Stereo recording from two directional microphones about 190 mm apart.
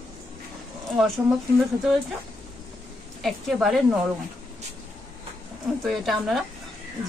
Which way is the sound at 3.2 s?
Centre (ahead or behind).